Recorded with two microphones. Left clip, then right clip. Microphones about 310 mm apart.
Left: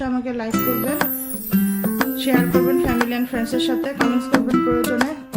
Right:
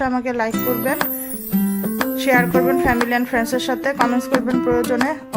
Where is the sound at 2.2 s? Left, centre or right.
Centre.